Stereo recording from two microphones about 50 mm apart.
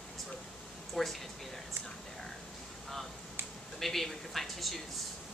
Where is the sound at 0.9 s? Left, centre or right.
Centre.